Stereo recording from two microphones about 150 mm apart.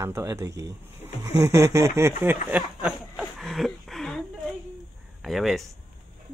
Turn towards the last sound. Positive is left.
turn(degrees=0)  # may be behind; listen again after turning